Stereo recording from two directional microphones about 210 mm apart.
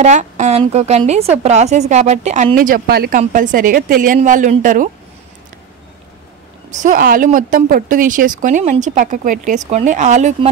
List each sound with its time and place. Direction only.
0.0 s speech: 35° right (ahead or behind)
6.7 s speech: 35° right (ahead or behind)